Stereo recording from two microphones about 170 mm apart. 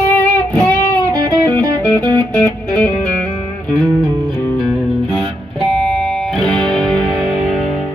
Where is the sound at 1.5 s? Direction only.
20° right (ahead or behind).